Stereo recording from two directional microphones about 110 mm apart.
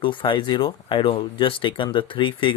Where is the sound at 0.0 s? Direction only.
50° left (ahead or behind).